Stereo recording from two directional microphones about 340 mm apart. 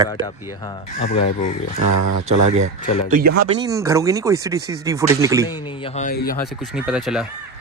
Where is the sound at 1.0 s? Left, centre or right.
Centre.